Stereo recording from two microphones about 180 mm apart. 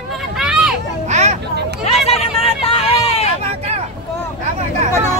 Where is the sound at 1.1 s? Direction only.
40° right (ahead or behind).